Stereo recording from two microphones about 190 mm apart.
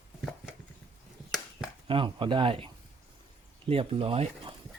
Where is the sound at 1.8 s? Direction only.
25° right (ahead or behind).